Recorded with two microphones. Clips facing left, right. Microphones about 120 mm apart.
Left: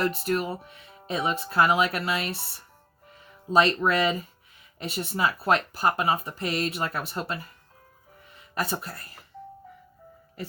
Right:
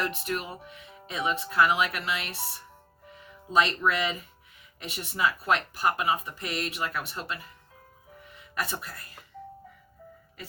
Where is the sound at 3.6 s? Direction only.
35° left (ahead or behind).